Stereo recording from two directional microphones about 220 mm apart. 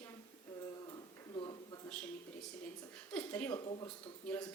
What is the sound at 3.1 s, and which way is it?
Speech, 5° left (ahead or behind).